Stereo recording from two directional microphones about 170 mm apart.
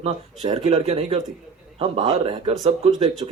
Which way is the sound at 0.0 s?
35° right (ahead or behind).